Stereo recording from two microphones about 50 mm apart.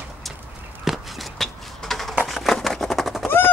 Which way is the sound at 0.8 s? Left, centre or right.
Centre.